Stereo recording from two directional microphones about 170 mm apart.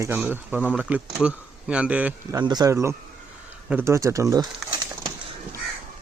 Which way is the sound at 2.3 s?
25° right (ahead or behind).